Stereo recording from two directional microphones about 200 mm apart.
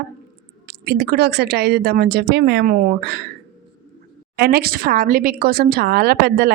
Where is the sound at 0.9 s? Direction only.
50° right (ahead or behind).